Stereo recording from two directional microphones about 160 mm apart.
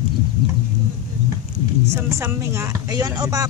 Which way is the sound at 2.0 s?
15° right (ahead or behind).